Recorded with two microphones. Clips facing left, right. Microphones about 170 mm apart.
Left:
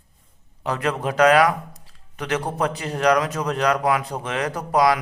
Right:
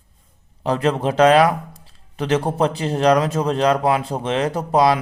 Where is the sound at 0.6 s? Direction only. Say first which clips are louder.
Right 5 dB; 30° right (ahead or behind).